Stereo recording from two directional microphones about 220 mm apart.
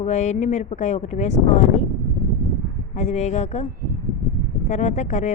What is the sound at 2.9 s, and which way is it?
Speech, 30° left (ahead or behind).